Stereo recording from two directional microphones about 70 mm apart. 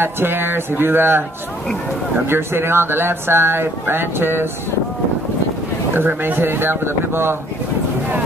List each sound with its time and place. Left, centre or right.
0.0 s speech: right
2.2 s speech: right
5.9 s speech: right